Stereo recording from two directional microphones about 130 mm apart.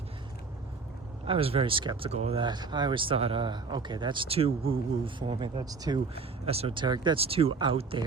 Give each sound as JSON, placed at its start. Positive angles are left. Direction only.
{"t": 1.3, "sound": "speech", "side_deg": -45}
{"t": 2.0, "sound": "speech", "side_deg": -50}
{"t": 6.1, "sound": "speech", "side_deg": -50}
{"t": 7.2, "sound": "speech", "side_deg": -50}